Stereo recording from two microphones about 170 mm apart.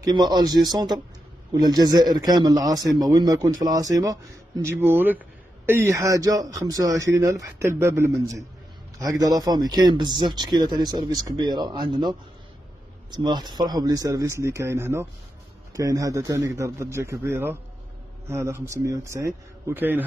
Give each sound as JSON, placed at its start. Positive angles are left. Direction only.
{"t": 0.0, "sound": "a man's voice", "side_deg": -25}